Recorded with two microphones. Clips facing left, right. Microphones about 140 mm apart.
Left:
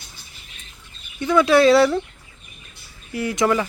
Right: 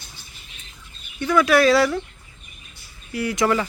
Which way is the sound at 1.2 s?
25° left (ahead or behind).